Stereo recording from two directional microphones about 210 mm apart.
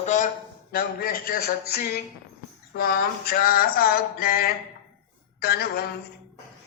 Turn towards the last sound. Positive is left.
turn(degrees=50)  # may be behind; listen again after turning